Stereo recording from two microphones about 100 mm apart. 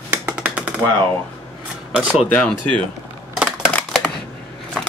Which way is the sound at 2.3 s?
10° left (ahead or behind).